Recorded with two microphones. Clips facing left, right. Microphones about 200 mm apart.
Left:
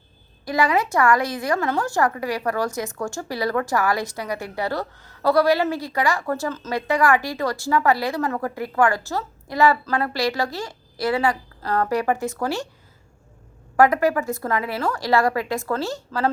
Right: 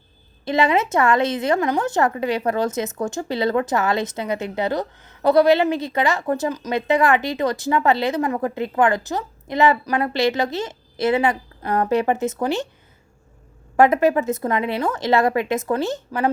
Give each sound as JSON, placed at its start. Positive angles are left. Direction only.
{"t": 0.4, "sound": "speech", "side_deg": -25}
{"t": 13.7, "sound": "speech", "side_deg": -20}